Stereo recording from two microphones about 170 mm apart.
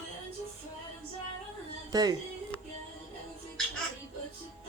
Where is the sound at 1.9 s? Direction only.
20° right (ahead or behind).